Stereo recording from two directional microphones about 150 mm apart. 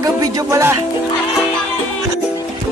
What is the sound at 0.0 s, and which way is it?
Speech, 25° right (ahead or behind).